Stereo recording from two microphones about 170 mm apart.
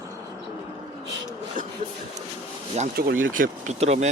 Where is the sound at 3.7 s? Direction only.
40° right (ahead or behind).